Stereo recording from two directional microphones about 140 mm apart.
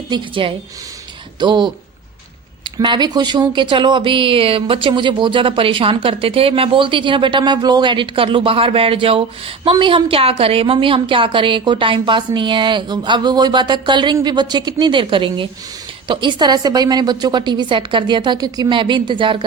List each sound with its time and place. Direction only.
0.1 s speech: 40° right (ahead or behind)
2.7 s speech: 30° right (ahead or behind)